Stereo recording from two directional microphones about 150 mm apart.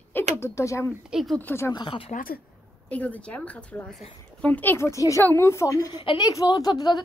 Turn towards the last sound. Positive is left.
turn(degrees=25)  # may be behind; listen again after turning